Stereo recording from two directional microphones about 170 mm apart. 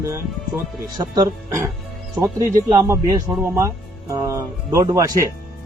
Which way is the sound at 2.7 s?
20° right (ahead or behind).